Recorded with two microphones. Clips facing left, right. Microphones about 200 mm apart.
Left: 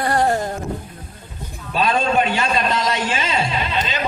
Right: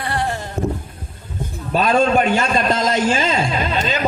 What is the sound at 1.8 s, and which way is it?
A man's voice, 45° right (ahead or behind).